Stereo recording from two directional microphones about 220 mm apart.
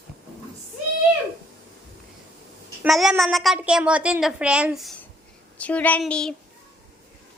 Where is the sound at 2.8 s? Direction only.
Centre (ahead or behind).